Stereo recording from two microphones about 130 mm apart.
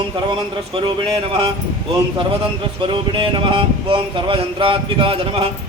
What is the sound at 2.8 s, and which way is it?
Speech, 40° right (ahead or behind).